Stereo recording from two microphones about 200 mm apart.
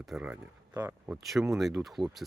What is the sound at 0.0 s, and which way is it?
Speech, 5° right (ahead or behind).